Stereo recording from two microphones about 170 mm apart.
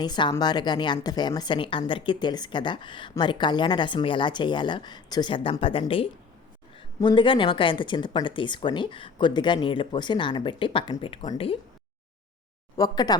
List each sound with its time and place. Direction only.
0.0 s a woman's voice: 25° left (ahead or behind)
12.7 s a woman's voice: 20° left (ahead or behind)